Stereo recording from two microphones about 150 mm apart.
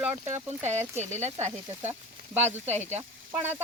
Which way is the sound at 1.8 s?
15° right (ahead or behind).